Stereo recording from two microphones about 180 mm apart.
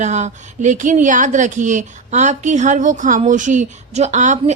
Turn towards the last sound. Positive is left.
turn(degrees=-40)  # may be behind; listen again after turning